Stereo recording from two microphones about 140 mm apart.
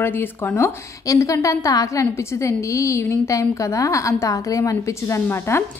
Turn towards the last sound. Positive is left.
turn(degrees=20)  # may be behind; listen again after turning